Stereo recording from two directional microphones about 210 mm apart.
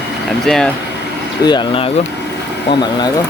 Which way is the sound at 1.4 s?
20° left (ahead or behind).